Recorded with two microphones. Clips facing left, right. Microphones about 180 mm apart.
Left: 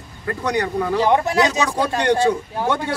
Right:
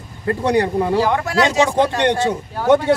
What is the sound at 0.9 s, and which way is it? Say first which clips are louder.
Speech: left 4 dB; 20° left (ahead or behind).